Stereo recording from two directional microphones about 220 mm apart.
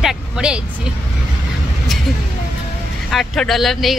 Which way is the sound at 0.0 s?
5° right (ahead or behind).